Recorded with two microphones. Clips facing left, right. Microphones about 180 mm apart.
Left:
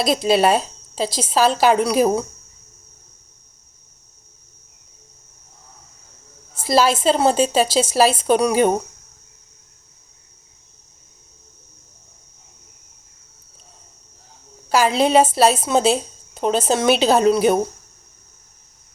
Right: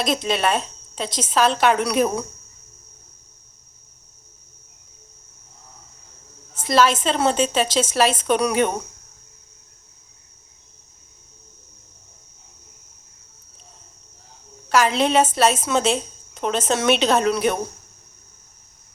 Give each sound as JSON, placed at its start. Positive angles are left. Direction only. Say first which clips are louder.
{"t": 0.0, "sound": "a woman's voice", "louder": "left 5 dB", "side_deg": 35}
{"t": 6.6, "sound": "a woman's voice", "louder": "left 1 dB", "side_deg": 35}
{"t": 14.7, "sound": "a woman's voice", "louder": "left 2 dB", "side_deg": 35}